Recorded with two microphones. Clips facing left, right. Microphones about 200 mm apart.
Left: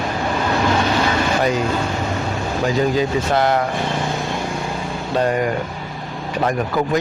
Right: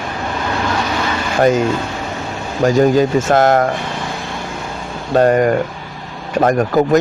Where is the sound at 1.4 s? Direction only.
45° right (ahead or behind).